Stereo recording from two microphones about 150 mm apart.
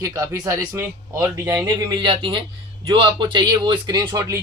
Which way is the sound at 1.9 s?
35° right (ahead or behind).